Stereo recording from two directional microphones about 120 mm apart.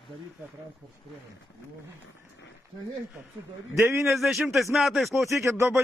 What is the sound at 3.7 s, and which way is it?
Speech, 20° right (ahead or behind).